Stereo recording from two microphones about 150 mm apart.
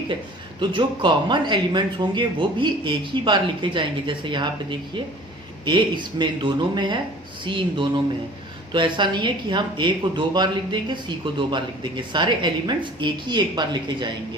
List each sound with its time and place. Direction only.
0.6 s speech: 35° right (ahead or behind)